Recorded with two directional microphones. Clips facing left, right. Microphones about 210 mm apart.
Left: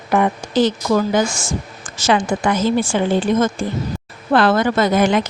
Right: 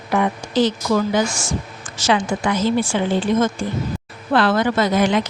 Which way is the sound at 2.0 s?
45° left (ahead or behind).